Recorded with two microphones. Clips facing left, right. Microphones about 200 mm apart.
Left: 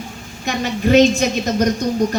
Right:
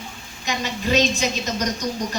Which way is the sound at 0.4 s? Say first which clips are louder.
Left 7 dB; 55° left (ahead or behind).